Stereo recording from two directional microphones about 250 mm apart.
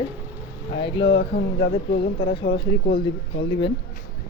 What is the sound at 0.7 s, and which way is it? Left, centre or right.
Speech, centre.